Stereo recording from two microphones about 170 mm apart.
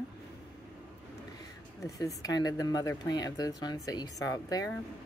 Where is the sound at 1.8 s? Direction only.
20° left (ahead or behind).